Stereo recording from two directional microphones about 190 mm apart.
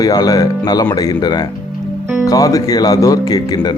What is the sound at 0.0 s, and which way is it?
Speech, 20° left (ahead or behind).